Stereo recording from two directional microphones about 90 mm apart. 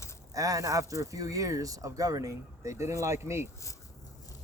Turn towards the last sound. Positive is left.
turn(degrees=-30)  # may be behind; listen again after turning